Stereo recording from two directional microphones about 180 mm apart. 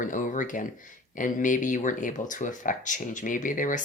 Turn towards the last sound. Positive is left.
turn(degrees=45)  # may be behind; listen again after turning